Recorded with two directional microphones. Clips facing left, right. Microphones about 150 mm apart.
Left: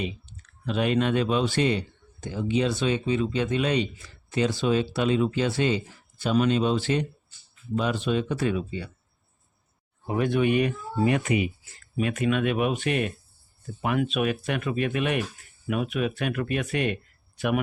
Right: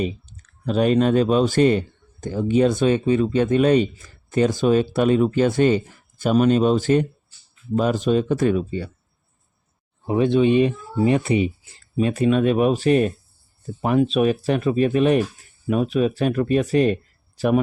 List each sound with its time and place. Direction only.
0.0 s speech: 40° right (ahead or behind)
10.1 s speech: 25° right (ahead or behind)